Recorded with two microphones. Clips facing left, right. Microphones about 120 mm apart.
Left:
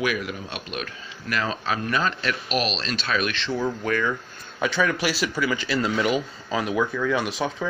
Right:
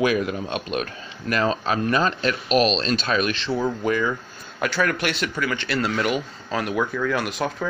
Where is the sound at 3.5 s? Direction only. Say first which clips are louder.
Right 2 dB; 15° right (ahead or behind).